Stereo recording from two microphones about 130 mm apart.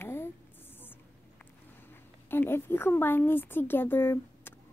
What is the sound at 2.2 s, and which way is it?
Speech, 15° left (ahead or behind).